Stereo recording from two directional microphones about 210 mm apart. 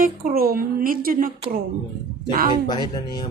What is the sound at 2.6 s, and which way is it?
Speech, 20° left (ahead or behind).